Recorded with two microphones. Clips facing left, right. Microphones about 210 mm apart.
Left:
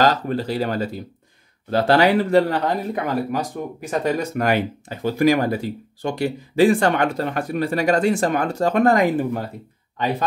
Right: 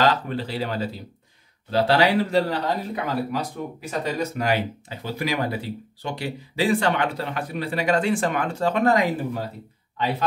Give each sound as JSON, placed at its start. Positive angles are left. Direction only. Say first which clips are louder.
{"t": 0.0, "sound": "speech", "louder": "left 3 dB", "side_deg": 40}